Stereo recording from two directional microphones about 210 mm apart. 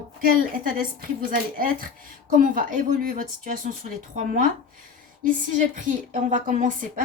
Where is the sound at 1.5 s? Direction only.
40° right (ahead or behind).